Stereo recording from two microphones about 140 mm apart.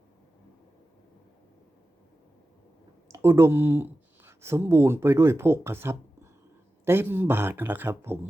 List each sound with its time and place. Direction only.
3.1 s speech: 20° right (ahead or behind)